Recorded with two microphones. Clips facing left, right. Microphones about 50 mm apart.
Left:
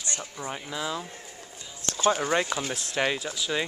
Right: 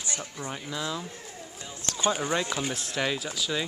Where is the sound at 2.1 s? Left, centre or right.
Centre.